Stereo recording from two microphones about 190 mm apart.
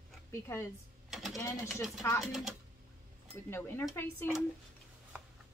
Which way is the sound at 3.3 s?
10° left (ahead or behind).